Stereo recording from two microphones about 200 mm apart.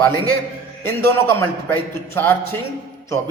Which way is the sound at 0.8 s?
10° left (ahead or behind).